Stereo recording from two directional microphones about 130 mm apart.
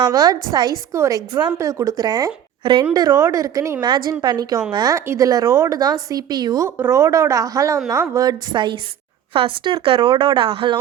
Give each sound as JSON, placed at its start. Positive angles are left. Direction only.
{"t": 0.0, "sound": "a woman's voice", "side_deg": -30}
{"t": 6.7, "sound": "a woman's voice", "side_deg": -20}
{"t": 8.2, "sound": "a woman's voice", "side_deg": -35}